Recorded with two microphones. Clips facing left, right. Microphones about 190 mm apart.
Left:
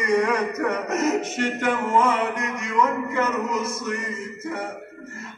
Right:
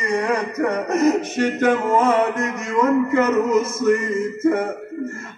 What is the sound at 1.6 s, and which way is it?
A man's voice, 40° right (ahead or behind).